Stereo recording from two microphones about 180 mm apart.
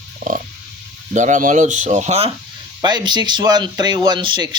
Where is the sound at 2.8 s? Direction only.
25° right (ahead or behind).